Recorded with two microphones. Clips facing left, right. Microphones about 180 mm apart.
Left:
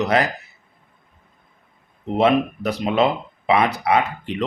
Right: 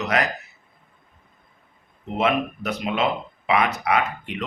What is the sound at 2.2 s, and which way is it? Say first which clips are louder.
Speech: left 5 dB; 35° left (ahead or behind).